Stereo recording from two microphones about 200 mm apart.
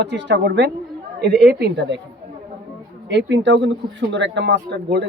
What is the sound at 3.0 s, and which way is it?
Speech, 65° right (ahead or behind).